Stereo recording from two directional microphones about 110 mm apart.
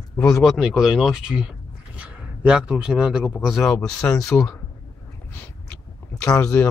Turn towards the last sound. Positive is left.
turn(degrees=30)  # may be behind; listen again after turning